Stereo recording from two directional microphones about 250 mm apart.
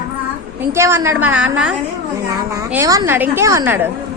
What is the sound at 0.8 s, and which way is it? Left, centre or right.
Speech, centre.